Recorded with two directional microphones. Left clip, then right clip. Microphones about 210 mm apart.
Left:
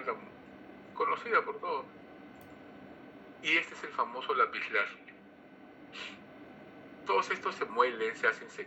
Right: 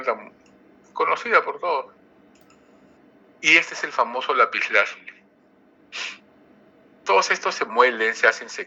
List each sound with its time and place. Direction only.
0.9 s a man's voice: 50° right (ahead or behind)
3.4 s a man's voice: 55° right (ahead or behind)
7.0 s a man's voice: 55° right (ahead or behind)